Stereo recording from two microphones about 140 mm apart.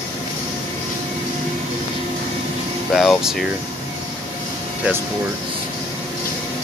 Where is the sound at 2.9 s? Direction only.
Centre (ahead or behind).